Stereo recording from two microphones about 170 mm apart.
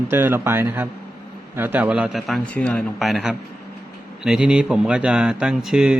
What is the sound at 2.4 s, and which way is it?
Speech, 5° left (ahead or behind).